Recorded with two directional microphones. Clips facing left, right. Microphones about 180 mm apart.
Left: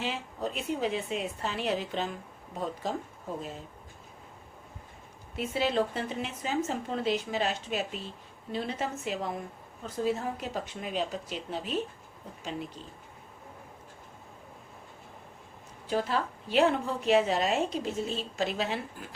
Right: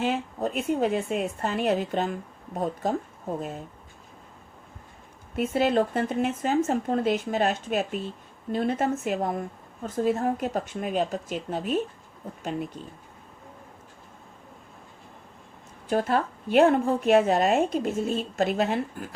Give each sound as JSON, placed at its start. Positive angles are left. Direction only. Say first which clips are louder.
{"t": 0.0, "sound": "a woman's voice", "louder": "right 7 dB", "side_deg": -50}
{"t": 5.4, "sound": "a woman's voice", "louder": "right 6 dB", "side_deg": -50}
{"t": 15.9, "sound": "a woman's voice", "louder": "right 5 dB", "side_deg": -50}